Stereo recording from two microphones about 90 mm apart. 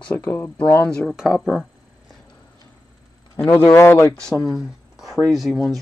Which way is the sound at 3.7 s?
30° left (ahead or behind).